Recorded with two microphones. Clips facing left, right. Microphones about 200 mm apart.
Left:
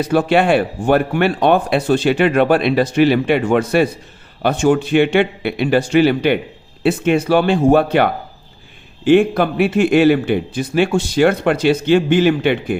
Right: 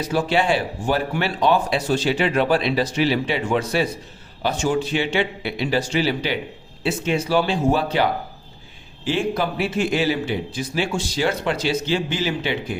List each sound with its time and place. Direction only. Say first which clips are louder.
0.0 s speech: left 6 dB; 60° left (ahead or behind)